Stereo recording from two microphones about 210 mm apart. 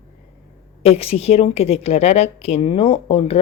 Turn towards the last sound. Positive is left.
turn(degrees=25)  # may be behind; listen again after turning